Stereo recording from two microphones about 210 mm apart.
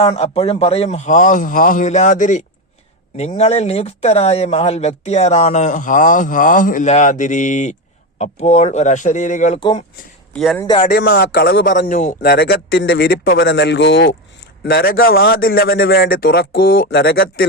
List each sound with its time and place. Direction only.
0.0 s speech: 30° left (ahead or behind)
9.6 s speech: 25° left (ahead or behind)
10.3 s speech: centre (ahead or behind)
10.9 s a man's voice: 50° left (ahead or behind)